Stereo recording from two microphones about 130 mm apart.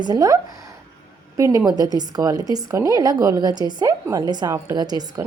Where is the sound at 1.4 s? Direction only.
25° right (ahead or behind).